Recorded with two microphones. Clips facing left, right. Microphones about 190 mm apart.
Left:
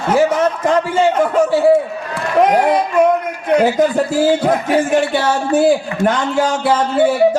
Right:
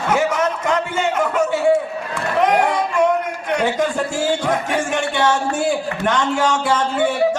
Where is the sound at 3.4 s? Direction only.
35° left (ahead or behind).